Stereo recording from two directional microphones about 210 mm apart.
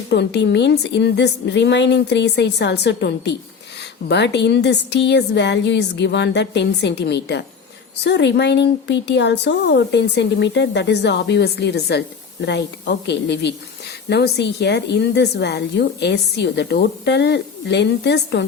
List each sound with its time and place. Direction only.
0.1 s a woman's voice: 55° left (ahead or behind)